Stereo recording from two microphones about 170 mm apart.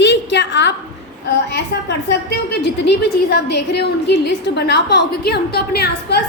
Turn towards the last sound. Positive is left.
turn(degrees=70)  # may be behind; listen again after turning